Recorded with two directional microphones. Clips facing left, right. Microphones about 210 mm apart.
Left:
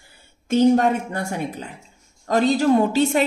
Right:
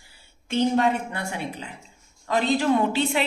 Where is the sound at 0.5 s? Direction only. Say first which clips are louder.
Left 5 dB; 45° left (ahead or behind).